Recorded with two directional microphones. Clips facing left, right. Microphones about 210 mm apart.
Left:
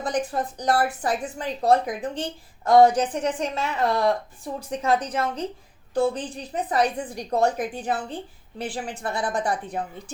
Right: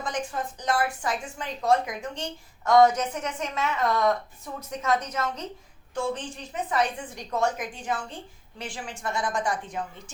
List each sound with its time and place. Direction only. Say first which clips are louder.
0.0 s a woman's voice: left 5 dB; 35° left (ahead or behind)